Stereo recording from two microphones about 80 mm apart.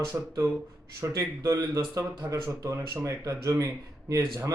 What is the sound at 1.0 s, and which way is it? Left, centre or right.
A man's voice, right.